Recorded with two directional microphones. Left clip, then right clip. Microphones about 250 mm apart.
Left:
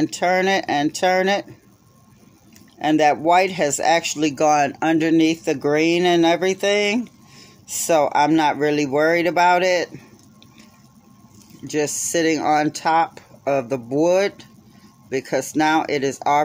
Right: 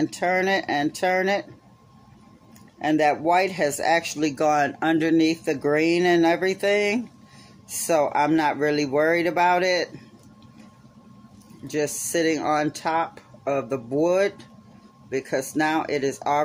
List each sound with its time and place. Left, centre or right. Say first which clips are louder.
0.0 s speech: left 4 dB; left
2.8 s speech: left 4 dB; left
11.6 s speech: left 4 dB; left